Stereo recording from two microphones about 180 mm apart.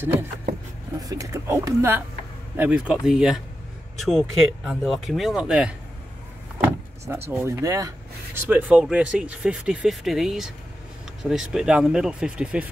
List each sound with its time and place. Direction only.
0.9 s speech: 20° right (ahead or behind)